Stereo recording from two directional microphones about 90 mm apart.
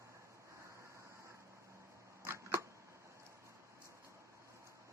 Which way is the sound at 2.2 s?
30° right (ahead or behind).